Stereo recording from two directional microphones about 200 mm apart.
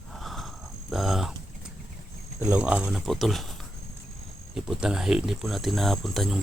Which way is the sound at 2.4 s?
5° right (ahead or behind).